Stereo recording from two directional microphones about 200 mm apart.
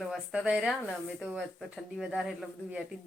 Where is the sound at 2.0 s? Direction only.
Centre (ahead or behind).